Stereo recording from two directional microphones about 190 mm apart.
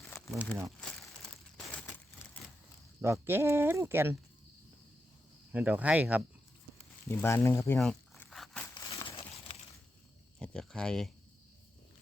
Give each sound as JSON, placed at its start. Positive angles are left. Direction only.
{"t": 0.3, "sound": "speech", "side_deg": 0}
{"t": 3.0, "sound": "speech", "side_deg": -15}
{"t": 5.5, "sound": "speech", "side_deg": -10}
{"t": 7.1, "sound": "speech", "side_deg": 10}
{"t": 7.8, "sound": "a sound", "side_deg": 0}
{"t": 8.7, "sound": "crumpling", "side_deg": 25}
{"t": 10.4, "sound": "a sound", "side_deg": 5}